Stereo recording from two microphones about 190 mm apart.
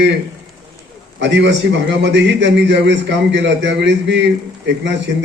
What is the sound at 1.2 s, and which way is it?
A man's voice, 70° right (ahead or behind).